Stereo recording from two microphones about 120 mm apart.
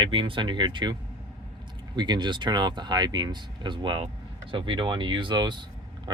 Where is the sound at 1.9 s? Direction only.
40° right (ahead or behind).